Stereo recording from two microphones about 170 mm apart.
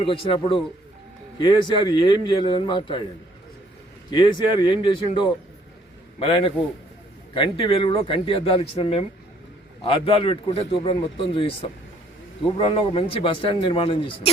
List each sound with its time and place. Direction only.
0.0 s a man's voice: 30° left (ahead or behind)
4.1 s a man's voice: 25° left (ahead or behind)